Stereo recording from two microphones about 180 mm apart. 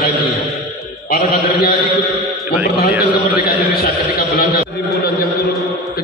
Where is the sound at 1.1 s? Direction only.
60° left (ahead or behind).